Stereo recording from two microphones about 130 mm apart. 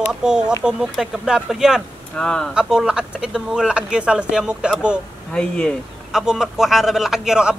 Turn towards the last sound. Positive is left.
turn(degrees=-5)  # may be behind; listen again after turning